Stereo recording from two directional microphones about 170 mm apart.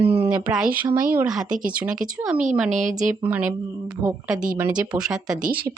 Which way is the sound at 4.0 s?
15° right (ahead or behind).